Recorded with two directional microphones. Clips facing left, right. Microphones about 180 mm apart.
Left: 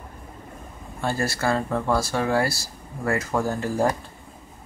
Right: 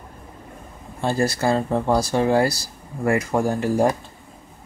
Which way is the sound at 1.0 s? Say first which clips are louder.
Right 4 dB; 20° right (ahead or behind).